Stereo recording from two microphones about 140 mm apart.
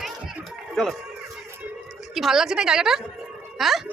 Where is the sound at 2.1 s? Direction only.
Centre (ahead or behind).